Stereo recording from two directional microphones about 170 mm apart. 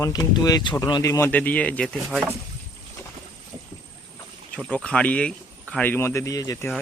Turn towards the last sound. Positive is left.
turn(degrees=20)  # may be behind; listen again after turning